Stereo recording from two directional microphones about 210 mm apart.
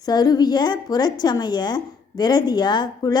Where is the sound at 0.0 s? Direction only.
20° left (ahead or behind).